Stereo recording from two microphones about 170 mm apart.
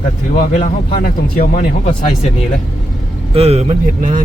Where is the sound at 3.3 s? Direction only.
35° right (ahead or behind).